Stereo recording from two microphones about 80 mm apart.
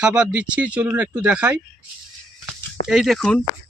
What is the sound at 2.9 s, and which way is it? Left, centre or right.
Speech, centre.